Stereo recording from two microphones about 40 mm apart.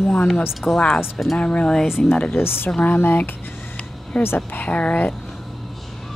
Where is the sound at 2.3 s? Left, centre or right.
Left.